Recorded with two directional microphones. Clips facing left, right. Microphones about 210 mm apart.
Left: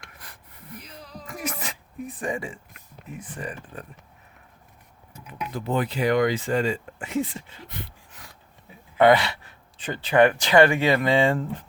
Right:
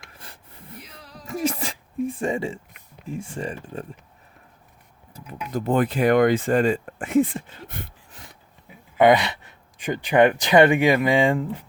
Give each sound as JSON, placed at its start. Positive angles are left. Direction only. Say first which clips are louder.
{"t": 0.1, "sound": "a sound", "louder": "right 2 dB", "side_deg": -30}
{"t": 1.3, "sound": "music", "louder": "right 8 dB", "side_deg": -30}
{"t": 3.1, "sound": "speech", "louder": "right 5 dB", "side_deg": -25}
{"t": 5.1, "sound": "speech", "louder": "right 4 dB", "side_deg": -45}
{"t": 8.1, "sound": "rub", "louder": "right 2 dB", "side_deg": -25}
{"t": 9.0, "sound": "speech", "louder": "right 1 dB", "side_deg": -20}